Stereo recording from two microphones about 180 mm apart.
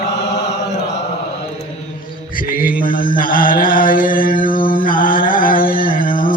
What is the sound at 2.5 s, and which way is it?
Mantra, 50° left (ahead or behind).